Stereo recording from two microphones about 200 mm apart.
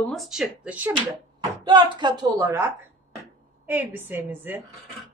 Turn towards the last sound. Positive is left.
turn(degrees=-10)  # may be behind; listen again after turning